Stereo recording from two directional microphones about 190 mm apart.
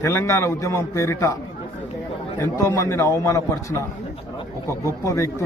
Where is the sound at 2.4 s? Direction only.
15° left (ahead or behind).